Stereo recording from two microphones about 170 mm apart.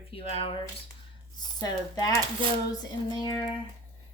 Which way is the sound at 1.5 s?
20° left (ahead or behind).